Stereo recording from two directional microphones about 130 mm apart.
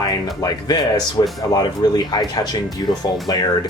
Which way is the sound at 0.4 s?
30° left (ahead or behind).